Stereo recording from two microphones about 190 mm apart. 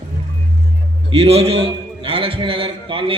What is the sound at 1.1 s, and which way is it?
A man's voice, 30° right (ahead or behind).